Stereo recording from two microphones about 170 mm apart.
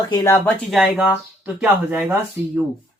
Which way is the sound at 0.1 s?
20° left (ahead or behind).